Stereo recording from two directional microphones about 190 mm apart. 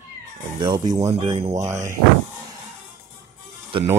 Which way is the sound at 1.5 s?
15° right (ahead or behind).